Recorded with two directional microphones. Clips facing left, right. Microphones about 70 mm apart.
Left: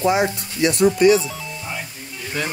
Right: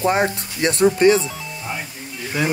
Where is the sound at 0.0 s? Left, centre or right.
Right.